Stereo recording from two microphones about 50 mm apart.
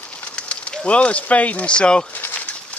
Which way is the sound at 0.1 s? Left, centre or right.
Left.